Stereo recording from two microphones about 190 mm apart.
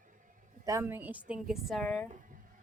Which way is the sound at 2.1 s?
45° right (ahead or behind).